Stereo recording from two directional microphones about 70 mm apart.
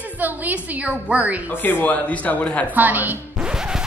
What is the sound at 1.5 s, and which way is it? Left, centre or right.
A man's voice, left.